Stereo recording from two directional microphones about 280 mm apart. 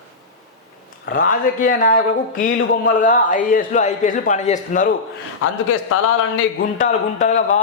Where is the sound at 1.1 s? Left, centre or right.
Left.